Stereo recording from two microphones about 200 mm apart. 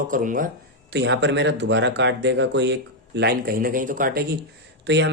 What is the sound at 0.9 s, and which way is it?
Speech, 60° right (ahead or behind).